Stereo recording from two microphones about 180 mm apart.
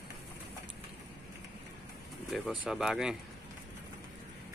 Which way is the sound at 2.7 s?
5° right (ahead or behind).